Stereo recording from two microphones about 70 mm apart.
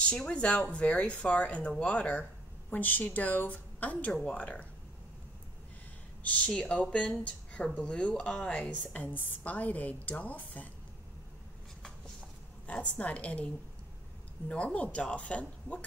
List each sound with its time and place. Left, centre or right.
0.0 s a woman's voice: centre
6.4 s a woman's voice: centre
12.6 s a woman's voice: centre
14.5 s speech: centre